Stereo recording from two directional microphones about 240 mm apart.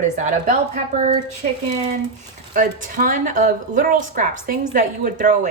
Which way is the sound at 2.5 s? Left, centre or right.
Right.